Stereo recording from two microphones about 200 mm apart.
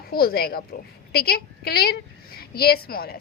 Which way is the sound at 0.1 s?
50° left (ahead or behind).